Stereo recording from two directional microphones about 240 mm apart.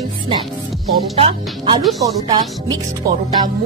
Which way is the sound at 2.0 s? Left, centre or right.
Centre.